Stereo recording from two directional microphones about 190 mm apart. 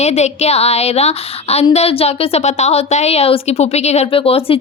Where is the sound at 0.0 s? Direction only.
35° left (ahead or behind).